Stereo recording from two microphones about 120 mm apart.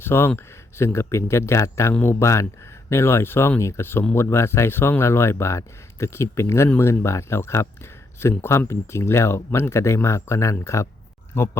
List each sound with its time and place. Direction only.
0.0 s speech: 20° left (ahead or behind)